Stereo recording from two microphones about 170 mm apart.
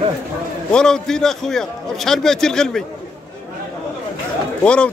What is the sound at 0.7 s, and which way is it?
Speech, 5° left (ahead or behind).